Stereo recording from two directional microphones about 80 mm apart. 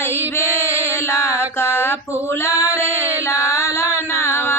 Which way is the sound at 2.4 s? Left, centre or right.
Left.